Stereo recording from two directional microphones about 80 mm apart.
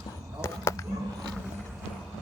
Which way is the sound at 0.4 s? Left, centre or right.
Left.